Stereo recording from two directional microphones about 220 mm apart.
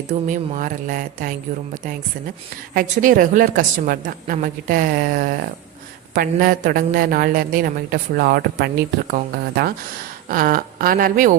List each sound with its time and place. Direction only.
0.1 s a woman's voice: 35° right (ahead or behind)